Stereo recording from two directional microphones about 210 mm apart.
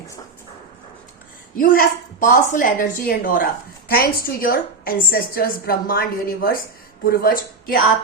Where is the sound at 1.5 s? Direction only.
40° left (ahead or behind).